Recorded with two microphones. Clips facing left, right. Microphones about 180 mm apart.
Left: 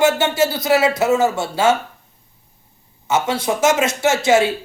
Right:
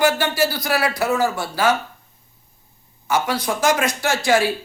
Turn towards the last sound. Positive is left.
turn(degrees=20)  # may be behind; listen again after turning